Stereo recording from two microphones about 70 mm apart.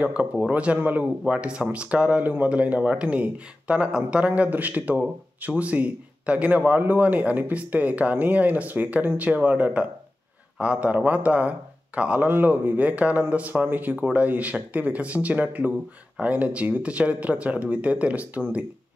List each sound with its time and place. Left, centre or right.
0.0 s a man's voice: centre
12.3 s a man's voice: right